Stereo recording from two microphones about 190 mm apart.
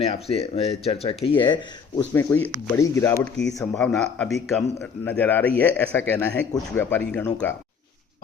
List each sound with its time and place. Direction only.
0.0 s speech: 30° left (ahead or behind)
2.1 s speech: 10° left (ahead or behind)
3.4 s speech: 5° left (ahead or behind)